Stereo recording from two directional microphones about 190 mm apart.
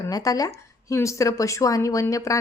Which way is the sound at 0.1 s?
20° left (ahead or behind).